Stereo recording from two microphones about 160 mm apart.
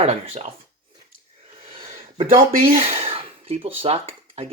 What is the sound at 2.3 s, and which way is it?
Speech, 65° right (ahead or behind).